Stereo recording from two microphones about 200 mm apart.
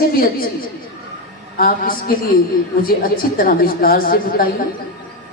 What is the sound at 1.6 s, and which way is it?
A man's voice, 45° left (ahead or behind).